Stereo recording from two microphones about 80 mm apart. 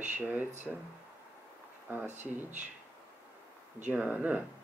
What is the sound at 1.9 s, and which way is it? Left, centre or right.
Speech, right.